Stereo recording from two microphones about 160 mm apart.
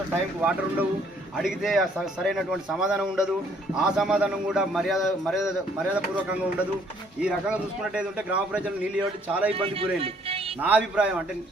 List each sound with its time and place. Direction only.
1.4 s a man's voice: centre (ahead or behind)
9.5 s speech: 35° right (ahead or behind)
10.6 s a man's voice: 10° right (ahead or behind)